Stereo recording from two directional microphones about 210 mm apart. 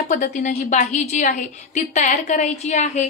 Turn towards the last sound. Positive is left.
turn(degrees=35)  # may be behind; listen again after turning